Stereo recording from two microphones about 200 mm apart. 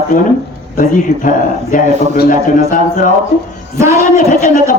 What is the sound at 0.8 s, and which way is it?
A man's voice, 40° left (ahead or behind).